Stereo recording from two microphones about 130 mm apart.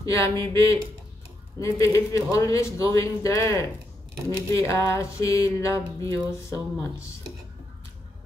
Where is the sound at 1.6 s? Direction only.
25° left (ahead or behind).